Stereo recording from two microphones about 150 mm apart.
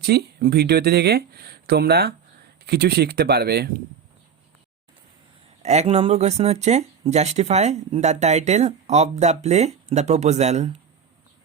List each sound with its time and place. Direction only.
0.0 s speech: 90° right
5.6 s speech: 50° right (ahead or behind)